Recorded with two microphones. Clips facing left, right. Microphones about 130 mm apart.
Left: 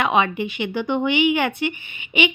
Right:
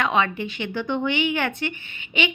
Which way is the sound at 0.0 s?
15° left (ahead or behind).